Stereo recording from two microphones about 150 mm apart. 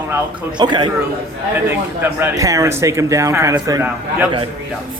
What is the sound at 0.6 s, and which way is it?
Speech, 30° right (ahead or behind).